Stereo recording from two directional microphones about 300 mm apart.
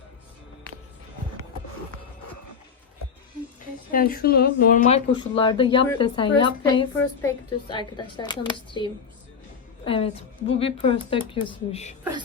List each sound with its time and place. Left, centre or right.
3.9 s a woman's voice: left